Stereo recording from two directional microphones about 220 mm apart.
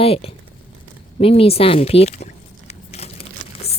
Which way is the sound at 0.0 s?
25° left (ahead or behind).